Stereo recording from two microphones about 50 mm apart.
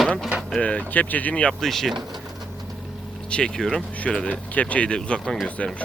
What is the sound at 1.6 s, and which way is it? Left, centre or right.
Speech, centre.